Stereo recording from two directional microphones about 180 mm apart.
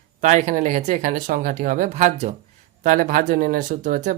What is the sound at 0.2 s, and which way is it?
Speech, 40° right (ahead or behind).